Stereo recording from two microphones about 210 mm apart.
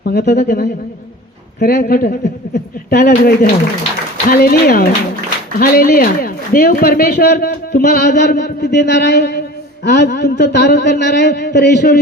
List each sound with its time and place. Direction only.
0.0 s a man's voice: 50° left (ahead or behind)